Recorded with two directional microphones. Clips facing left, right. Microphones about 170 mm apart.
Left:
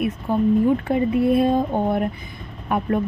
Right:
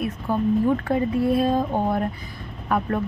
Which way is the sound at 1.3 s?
25° left (ahead or behind).